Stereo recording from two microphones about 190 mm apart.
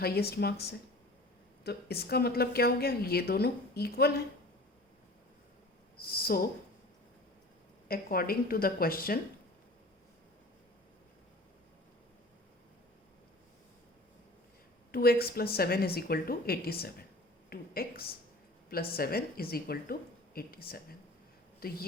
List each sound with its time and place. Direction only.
0.0 s a woman's voice: 55° left (ahead or behind)
1.6 s a woman's voice: 55° left (ahead or behind)
6.0 s a woman's voice: 50° left (ahead or behind)
7.9 s a woman's voice: 50° left (ahead or behind)
14.9 s a woman's voice: 55° left (ahead or behind)